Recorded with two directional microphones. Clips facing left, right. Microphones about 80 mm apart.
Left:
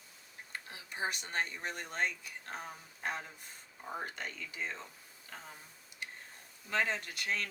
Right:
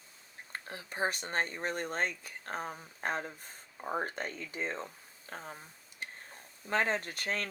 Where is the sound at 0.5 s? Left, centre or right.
Right.